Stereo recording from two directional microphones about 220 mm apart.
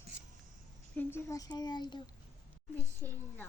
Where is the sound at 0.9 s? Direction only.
10° left (ahead or behind).